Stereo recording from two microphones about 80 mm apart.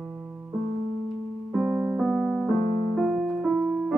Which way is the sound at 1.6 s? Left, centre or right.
Right.